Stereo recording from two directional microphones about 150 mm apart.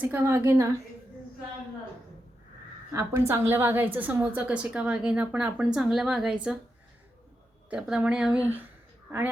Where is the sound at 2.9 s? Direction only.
20° right (ahead or behind).